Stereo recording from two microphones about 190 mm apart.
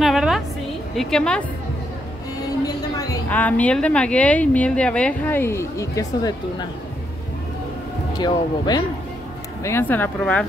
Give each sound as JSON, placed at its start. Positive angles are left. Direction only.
{"t": 0.0, "sound": "a sound", "side_deg": 0}
{"t": 0.9, "sound": "a woman's voice", "side_deg": 5}
{"t": 2.4, "sound": "a woman's voice", "side_deg": 20}
{"t": 8.2, "sound": "speech", "side_deg": 20}